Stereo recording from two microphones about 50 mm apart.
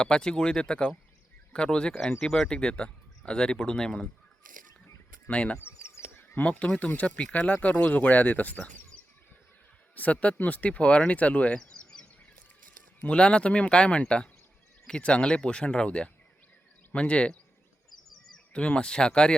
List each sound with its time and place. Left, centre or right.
0.0 s speech: centre
5.3 s speech: left
5.5 s a sound: left
6.4 s speech: left
9.9 s speech: left
13.1 s speech: centre
18.5 s speech: left